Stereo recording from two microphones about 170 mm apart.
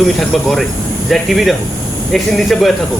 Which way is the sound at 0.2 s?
Centre (ahead or behind).